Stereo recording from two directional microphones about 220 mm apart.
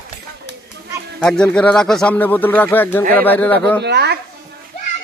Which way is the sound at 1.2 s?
5° left (ahead or behind).